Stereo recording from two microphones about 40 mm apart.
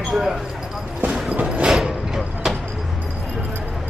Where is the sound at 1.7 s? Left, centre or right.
Centre.